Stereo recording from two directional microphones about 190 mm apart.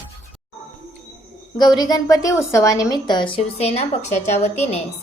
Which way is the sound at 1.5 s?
20° left (ahead or behind).